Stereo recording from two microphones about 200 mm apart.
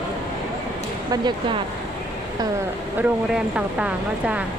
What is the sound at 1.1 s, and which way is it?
Speech, 25° right (ahead or behind).